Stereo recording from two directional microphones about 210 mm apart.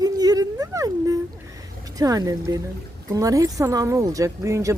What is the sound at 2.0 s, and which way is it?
A child's voice, 15° right (ahead or behind).